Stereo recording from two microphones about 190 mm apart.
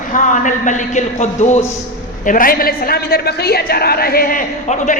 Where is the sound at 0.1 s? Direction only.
40° left (ahead or behind).